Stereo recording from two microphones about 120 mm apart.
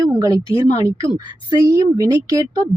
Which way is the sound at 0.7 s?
25° right (ahead or behind).